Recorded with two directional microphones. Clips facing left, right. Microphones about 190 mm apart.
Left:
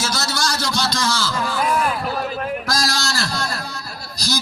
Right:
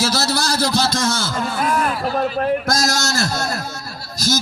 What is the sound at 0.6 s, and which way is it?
Speech, 55° right (ahead or behind).